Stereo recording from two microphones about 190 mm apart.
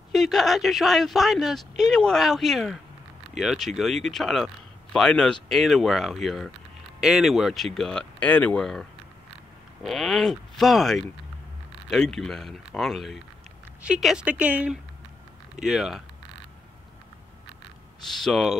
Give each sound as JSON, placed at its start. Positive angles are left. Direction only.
{"t": 0.1, "sound": "speech", "side_deg": 0}
{"t": 9.8, "sound": "speech", "side_deg": 0}
{"t": 18.1, "sound": "speech", "side_deg": 0}